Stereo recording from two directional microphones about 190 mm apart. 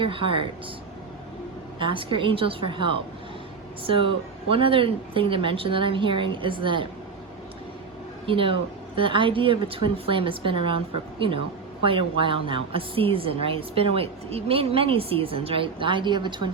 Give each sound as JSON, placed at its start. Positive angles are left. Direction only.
{"t": 0.0, "sound": "a woman's voice", "side_deg": -25}
{"t": 1.8, "sound": "a woman's voice", "side_deg": -25}
{"t": 8.3, "sound": "a woman's voice", "side_deg": -30}
{"t": 11.8, "sound": "a woman's voice", "side_deg": -25}